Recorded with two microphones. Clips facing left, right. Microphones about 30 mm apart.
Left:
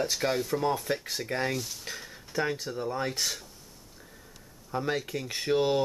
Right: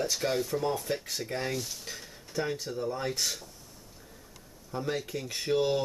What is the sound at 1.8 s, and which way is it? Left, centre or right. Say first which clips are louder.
Speech: left 3 dB; centre.